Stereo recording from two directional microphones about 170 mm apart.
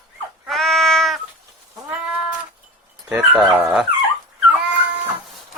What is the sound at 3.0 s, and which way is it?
Speech, 5° right (ahead or behind).